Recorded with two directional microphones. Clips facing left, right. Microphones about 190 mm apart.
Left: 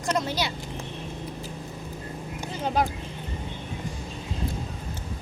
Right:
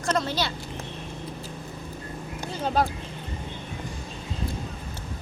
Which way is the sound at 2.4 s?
15° left (ahead or behind).